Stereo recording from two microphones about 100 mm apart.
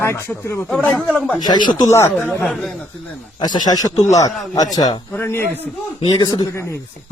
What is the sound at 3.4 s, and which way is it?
Speech, 45° left (ahead or behind).